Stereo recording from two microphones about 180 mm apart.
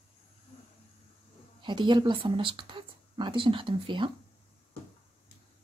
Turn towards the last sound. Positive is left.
turn(degrees=-25)  # may be behind; listen again after turning